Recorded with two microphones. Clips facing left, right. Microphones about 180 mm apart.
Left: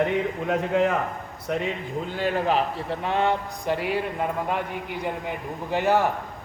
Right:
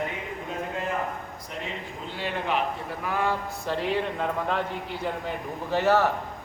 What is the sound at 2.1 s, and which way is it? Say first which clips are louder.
A man's voice: left 5 dB; 40° left (ahead or behind).